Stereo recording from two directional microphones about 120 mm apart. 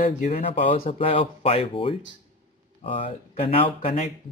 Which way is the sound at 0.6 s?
50° left (ahead or behind).